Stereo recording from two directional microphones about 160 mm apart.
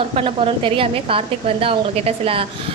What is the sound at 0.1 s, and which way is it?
A woman's voice, 35° right (ahead or behind).